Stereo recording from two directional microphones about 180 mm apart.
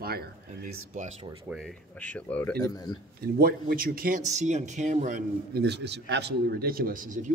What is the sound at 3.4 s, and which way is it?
Speech, 55° right (ahead or behind).